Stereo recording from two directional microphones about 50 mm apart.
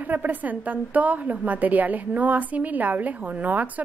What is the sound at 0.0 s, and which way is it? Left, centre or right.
A woman's voice, right.